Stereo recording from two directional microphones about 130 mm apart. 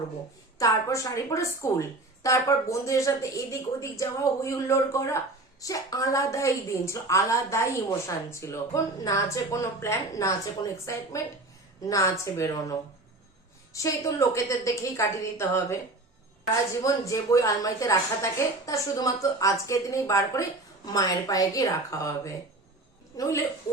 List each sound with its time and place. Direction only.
0.6 s a woman's voice: 25° left (ahead or behind)
13.7 s a woman's voice: 25° left (ahead or behind)
16.8 s a woman's voice: 25° left (ahead or behind)